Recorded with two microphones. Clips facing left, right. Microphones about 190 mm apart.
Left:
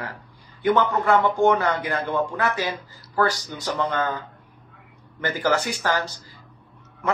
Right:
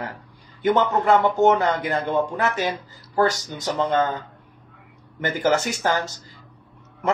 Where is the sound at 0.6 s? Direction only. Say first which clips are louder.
Right 1 dB; 25° right (ahead or behind).